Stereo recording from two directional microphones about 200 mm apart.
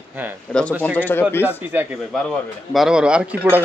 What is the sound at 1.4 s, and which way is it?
Speech, 10° right (ahead or behind).